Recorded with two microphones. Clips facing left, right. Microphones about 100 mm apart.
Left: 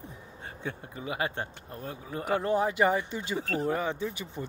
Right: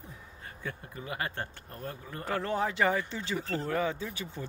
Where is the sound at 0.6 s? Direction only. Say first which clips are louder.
Left 3 dB; 20° left (ahead or behind).